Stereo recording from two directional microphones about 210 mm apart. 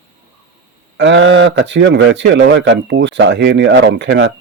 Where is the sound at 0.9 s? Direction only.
60° right (ahead or behind).